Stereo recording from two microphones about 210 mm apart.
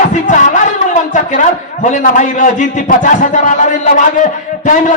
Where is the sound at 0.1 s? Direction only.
35° left (ahead or behind).